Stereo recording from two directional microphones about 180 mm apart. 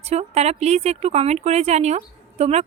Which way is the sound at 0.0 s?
35° right (ahead or behind).